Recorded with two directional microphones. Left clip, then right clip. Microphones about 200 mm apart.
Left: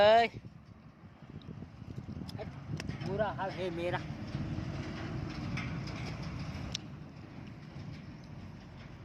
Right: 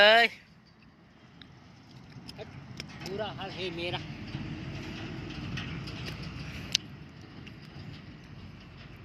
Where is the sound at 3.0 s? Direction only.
20° left (ahead or behind).